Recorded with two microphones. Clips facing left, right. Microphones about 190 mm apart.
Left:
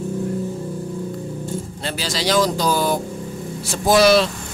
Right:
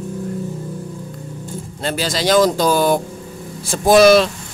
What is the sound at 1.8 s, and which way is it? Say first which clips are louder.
Speech: right 5 dB; 50° right (ahead or behind).